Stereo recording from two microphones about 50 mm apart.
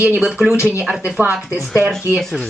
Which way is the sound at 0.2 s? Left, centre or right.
Centre.